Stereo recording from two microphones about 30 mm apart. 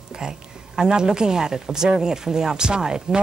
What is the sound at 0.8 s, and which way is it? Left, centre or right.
Speech, right.